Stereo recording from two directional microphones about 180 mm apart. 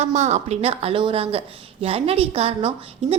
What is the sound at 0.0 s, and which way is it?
A woman's voice, 40° right (ahead or behind).